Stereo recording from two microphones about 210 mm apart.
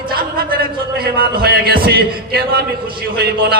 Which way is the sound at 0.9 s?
45° right (ahead or behind).